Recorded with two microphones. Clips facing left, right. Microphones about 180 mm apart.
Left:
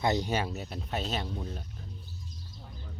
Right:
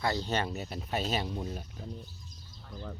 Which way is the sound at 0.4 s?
Centre (ahead or behind).